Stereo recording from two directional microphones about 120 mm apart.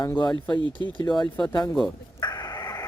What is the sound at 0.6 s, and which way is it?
Speech, 40° right (ahead or behind).